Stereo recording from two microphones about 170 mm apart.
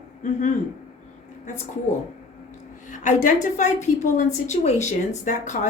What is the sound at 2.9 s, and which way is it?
A woman's voice, 45° left (ahead or behind).